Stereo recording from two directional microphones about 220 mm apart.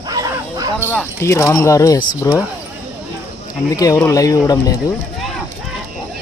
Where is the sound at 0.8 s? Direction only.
10° left (ahead or behind).